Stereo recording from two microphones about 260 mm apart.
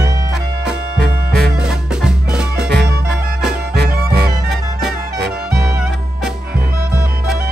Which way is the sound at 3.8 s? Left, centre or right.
Right.